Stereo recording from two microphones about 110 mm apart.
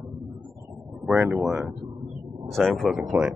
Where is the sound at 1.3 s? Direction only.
Centre (ahead or behind).